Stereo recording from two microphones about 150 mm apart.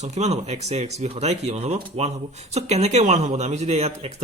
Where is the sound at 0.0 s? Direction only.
50° right (ahead or behind).